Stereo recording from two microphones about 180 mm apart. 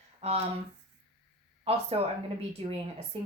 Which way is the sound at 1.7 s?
35° right (ahead or behind).